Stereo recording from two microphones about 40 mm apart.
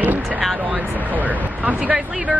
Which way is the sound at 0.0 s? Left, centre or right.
Right.